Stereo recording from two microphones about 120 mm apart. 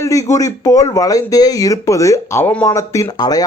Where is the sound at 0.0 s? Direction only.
25° left (ahead or behind).